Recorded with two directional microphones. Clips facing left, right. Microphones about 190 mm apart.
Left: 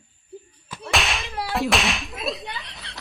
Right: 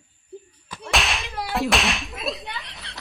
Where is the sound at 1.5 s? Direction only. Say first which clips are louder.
Even; centre (ahead or behind).